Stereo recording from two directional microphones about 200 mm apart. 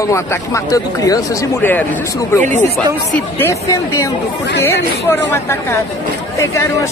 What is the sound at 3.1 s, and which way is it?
Speech, 15° left (ahead or behind).